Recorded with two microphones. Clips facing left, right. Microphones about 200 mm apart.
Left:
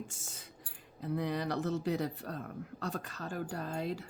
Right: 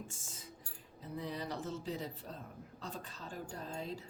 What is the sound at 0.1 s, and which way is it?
Speech, 70° left (ahead or behind).